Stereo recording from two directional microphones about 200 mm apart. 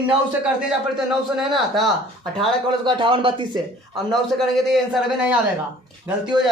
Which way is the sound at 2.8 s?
25° right (ahead or behind).